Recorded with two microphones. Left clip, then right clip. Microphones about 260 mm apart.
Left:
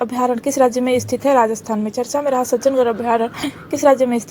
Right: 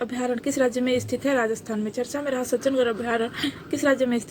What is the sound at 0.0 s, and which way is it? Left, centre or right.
A woman's voice, centre.